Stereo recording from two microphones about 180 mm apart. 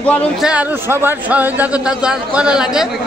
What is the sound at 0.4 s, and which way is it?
A man's voice, 5° right (ahead or behind).